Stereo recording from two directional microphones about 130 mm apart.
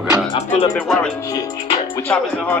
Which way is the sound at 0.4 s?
55° left (ahead or behind).